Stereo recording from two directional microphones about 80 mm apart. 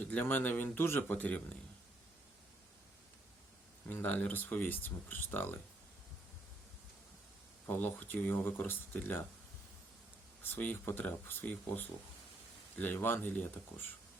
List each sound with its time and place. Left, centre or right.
0.1 s speech: left
3.9 s speech: left
7.7 s speech: left
10.4 s speech: left